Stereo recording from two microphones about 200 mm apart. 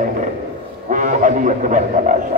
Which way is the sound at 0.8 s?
40° right (ahead or behind).